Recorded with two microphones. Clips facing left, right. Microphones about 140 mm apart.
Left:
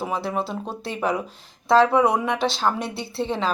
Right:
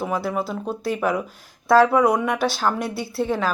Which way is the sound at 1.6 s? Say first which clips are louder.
Right 1 dB; 20° left (ahead or behind).